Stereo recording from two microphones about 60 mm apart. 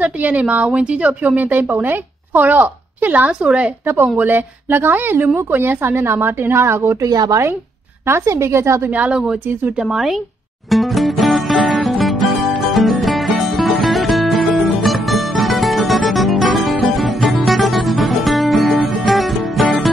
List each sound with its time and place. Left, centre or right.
0.0 s a woman's voice: right
3.8 s speech: right
7.0 s a woman's voice: right
8.1 s a woman's voice: right
9.1 s speech: centre
10.7 s music: centre